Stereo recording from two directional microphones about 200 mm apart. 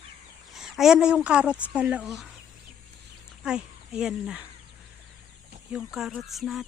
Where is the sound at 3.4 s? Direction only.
5° right (ahead or behind).